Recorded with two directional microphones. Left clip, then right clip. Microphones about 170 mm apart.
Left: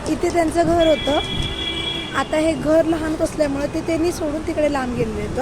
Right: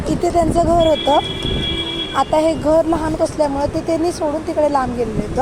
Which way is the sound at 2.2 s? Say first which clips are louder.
Right 5 dB; centre (ahead or behind).